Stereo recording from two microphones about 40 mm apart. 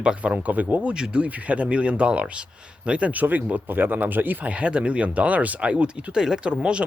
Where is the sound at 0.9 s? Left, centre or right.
Right.